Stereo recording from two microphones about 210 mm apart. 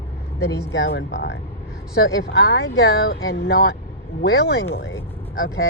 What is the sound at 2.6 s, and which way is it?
Speech, 70° left (ahead or behind).